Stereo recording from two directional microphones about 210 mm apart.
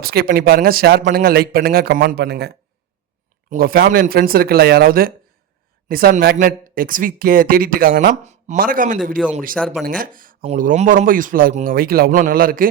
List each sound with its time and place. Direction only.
0.0 s speech: 45° right (ahead or behind)
3.5 s a man's voice: 45° right (ahead or behind)
9.6 s speech: centre (ahead or behind)
9.8 s a man's voice: 45° right (ahead or behind)